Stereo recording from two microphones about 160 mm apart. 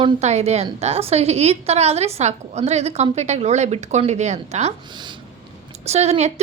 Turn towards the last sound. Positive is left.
turn(degrees=-40)  # may be behind; listen again after turning